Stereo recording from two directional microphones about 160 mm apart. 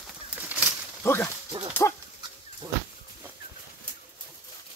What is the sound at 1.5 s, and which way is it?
Speech, 30° right (ahead or behind).